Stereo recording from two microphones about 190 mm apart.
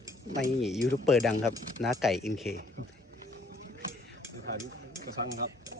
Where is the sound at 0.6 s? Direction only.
Centre (ahead or behind).